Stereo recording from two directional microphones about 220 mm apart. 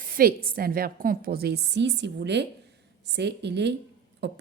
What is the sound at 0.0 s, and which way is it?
A woman's voice, 40° right (ahead or behind).